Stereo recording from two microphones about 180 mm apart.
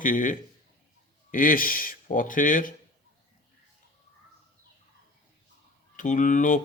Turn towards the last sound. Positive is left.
turn(degrees=45)  # may be behind; listen again after turning